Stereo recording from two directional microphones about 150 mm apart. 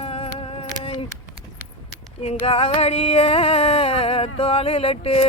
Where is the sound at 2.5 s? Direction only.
40° left (ahead or behind).